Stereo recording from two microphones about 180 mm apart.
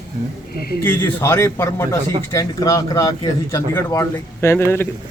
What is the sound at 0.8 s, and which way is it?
A man's voice, 10° left (ahead or behind).